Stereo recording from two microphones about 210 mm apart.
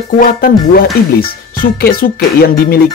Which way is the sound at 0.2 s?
45° left (ahead or behind).